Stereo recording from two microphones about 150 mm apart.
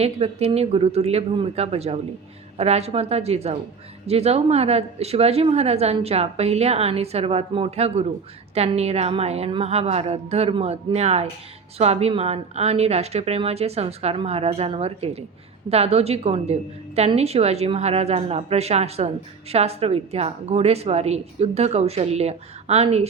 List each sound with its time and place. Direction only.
0.0 s a woman's voice: 45° right (ahead or behind)